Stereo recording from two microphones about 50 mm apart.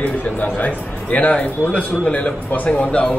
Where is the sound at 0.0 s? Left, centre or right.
Left.